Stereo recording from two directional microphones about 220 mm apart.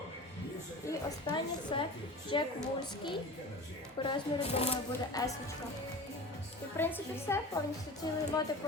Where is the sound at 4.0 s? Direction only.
25° left (ahead or behind).